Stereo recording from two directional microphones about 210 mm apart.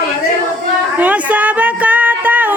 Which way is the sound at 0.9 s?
5° right (ahead or behind).